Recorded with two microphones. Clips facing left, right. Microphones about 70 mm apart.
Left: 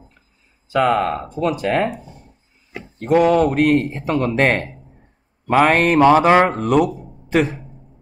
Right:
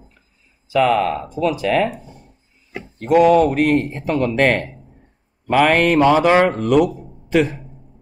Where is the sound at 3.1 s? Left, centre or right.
Left.